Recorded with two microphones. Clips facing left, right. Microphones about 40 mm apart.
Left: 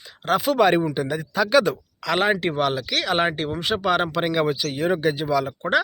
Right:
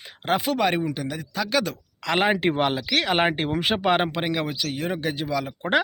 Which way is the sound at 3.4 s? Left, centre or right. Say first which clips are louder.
Even; right.